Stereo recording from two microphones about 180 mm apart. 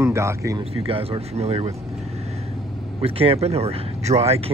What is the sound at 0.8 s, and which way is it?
Speech, 30° right (ahead or behind).